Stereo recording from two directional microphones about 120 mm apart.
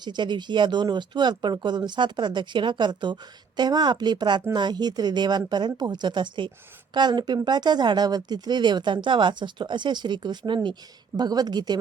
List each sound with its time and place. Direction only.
0.0 s speech: 40° right (ahead or behind)